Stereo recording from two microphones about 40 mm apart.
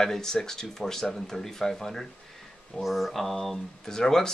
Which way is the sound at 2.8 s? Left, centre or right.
Centre.